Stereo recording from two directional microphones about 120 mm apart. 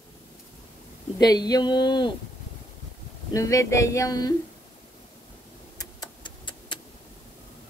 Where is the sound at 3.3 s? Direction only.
25° left (ahead or behind).